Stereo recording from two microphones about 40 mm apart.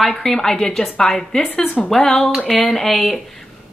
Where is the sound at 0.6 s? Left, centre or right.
Left.